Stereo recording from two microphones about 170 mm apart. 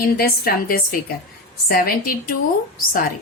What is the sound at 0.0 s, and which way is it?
A woman's voice, 60° left (ahead or behind).